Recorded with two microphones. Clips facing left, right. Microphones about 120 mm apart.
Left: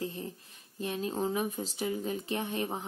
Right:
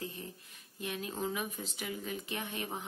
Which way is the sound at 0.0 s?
30° left (ahead or behind).